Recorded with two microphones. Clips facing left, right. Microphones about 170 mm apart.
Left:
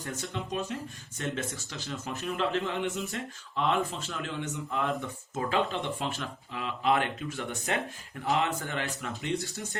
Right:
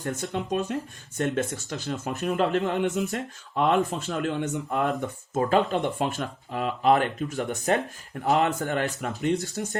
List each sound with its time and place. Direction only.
0.0 s speech: 50° right (ahead or behind)